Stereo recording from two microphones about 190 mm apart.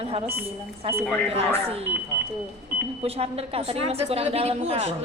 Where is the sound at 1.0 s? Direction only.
5° left (ahead or behind).